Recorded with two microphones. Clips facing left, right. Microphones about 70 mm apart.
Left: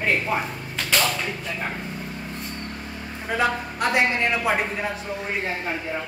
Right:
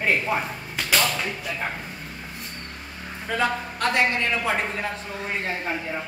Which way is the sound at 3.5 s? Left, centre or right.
Centre.